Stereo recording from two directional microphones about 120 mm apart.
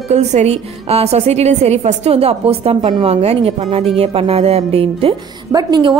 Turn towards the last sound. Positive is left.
turn(degrees=-40)  # may be behind; listen again after turning